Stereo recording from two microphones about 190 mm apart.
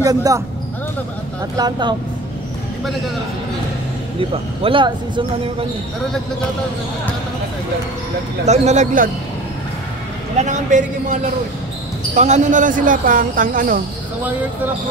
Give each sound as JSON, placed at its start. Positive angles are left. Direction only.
{"t": 0.0, "sound": "speech", "side_deg": -20}
{"t": 1.6, "sound": "speech", "side_deg": -25}
{"t": 4.2, "sound": "speech", "side_deg": -30}
{"t": 8.5, "sound": "a man's voice", "side_deg": -40}
{"t": 10.3, "sound": "a man's voice", "side_deg": -40}
{"t": 12.2, "sound": "speech", "side_deg": -40}